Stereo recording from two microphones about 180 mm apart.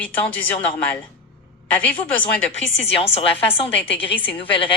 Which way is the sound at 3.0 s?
30° left (ahead or behind).